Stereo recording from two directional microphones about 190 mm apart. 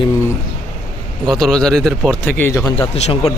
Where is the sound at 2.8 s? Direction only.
30° left (ahead or behind).